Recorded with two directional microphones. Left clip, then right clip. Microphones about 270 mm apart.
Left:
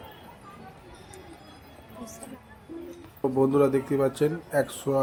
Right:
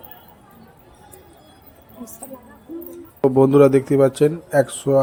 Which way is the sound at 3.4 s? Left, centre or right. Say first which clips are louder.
Right 9 dB; right.